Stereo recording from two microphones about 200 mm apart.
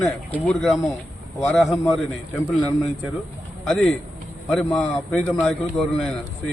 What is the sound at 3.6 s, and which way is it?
A man's voice, centre (ahead or behind).